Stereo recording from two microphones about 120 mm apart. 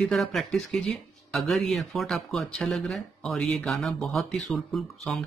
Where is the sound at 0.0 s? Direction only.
Centre (ahead or behind).